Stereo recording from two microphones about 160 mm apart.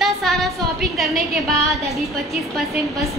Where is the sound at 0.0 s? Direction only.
Centre (ahead or behind).